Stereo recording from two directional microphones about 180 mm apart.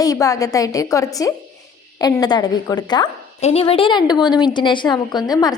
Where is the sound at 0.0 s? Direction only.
20° left (ahead or behind).